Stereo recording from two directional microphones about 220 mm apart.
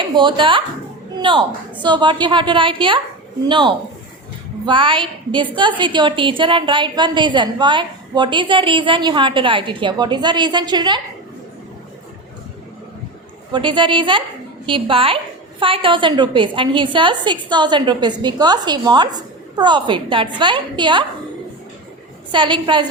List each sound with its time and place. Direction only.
0.0 s speech: 20° right (ahead or behind)
1.1 s a sound: 20° right (ahead or behind)
1.8 s a woman's voice: 20° right (ahead or behind)
13.5 s a woman's voice: 20° right (ahead or behind)
22.3 s a woman's voice: 20° right (ahead or behind)